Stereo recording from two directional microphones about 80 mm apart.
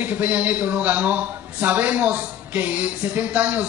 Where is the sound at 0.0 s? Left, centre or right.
Centre.